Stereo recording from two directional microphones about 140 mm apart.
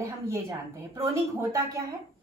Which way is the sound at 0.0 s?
20° right (ahead or behind).